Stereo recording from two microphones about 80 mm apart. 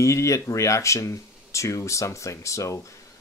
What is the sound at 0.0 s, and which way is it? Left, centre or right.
Speech, left.